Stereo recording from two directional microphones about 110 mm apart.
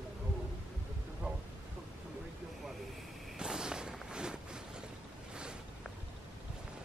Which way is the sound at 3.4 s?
5° right (ahead or behind).